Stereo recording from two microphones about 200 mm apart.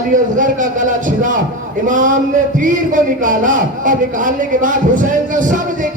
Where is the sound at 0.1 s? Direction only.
40° right (ahead or behind).